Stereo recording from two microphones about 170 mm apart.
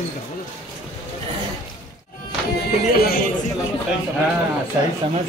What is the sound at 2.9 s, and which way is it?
Speech, 65° left (ahead or behind).